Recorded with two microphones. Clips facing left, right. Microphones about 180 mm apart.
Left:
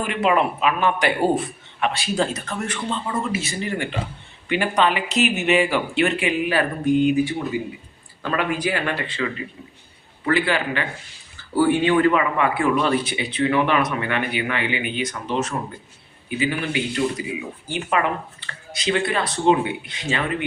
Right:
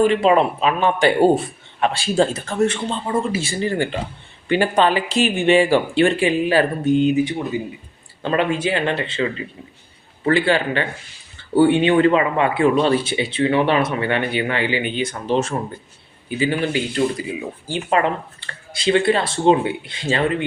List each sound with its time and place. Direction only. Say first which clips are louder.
0.0 s speech: right 5 dB; 30° right (ahead or behind)